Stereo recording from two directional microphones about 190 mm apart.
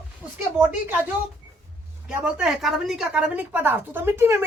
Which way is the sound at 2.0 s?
5° right (ahead or behind).